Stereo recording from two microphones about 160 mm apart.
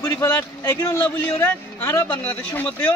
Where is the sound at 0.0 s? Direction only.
15° left (ahead or behind).